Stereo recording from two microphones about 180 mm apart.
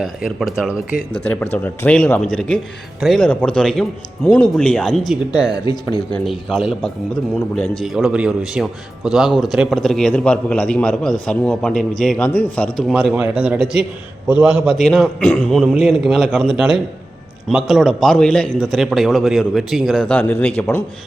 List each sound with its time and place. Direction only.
0.0 s a man's voice: centre (ahead or behind)
1.2 s a man's voice: 10° left (ahead or behind)
12.9 s a man's voice: 5° right (ahead or behind)